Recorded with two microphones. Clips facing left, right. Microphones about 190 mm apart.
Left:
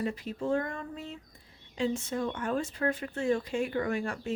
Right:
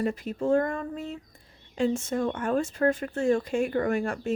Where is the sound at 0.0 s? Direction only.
50° right (ahead or behind).